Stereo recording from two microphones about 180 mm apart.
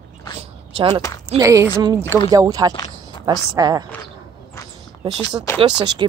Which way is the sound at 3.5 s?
20° right (ahead or behind).